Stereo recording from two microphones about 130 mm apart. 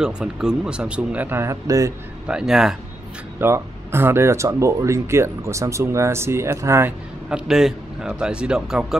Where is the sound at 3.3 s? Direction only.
20° right (ahead or behind).